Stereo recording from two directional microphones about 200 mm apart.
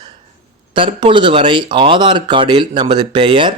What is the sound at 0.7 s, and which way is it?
Speech, 25° right (ahead or behind).